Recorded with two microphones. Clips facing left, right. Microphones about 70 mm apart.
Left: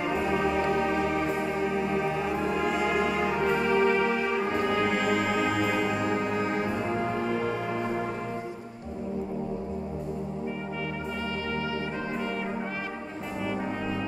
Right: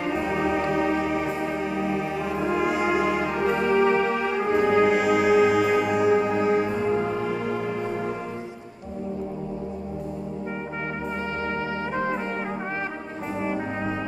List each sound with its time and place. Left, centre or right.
0.1 s music: centre
13.4 s brass instrument: right